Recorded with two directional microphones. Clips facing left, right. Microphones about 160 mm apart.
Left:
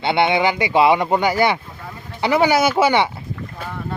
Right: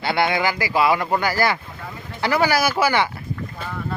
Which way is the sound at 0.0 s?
25° left (ahead or behind).